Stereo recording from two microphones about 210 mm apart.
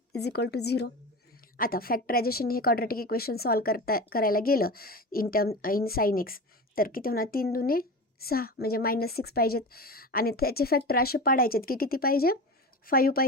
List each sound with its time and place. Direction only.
0.1 s a woman's voice: 50° left (ahead or behind)